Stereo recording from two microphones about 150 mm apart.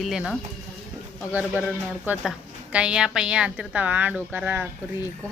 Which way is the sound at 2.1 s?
10° right (ahead or behind).